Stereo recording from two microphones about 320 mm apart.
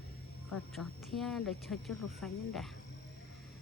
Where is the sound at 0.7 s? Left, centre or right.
Centre.